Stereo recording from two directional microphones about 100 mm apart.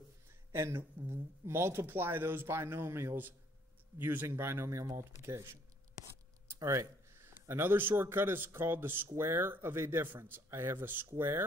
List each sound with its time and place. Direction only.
0.5 s speech: 25° right (ahead or behind)